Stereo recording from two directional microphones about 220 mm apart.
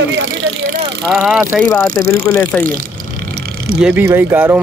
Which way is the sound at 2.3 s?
10° left (ahead or behind).